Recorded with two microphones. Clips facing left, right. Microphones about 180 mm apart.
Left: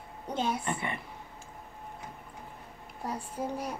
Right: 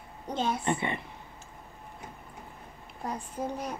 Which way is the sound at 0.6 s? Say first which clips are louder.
Right 4 dB; 25° right (ahead or behind).